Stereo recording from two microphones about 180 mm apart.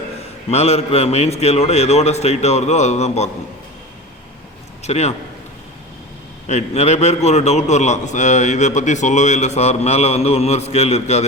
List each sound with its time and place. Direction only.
0.5 s a man's voice: 35° left (ahead or behind)
4.8 s a man's voice: 35° left (ahead or behind)
6.5 s a man's voice: 40° left (ahead or behind)